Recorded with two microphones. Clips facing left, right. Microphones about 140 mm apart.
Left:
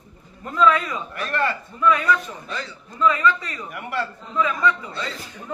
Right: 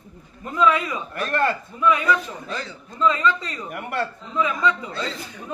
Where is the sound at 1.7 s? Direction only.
15° right (ahead or behind).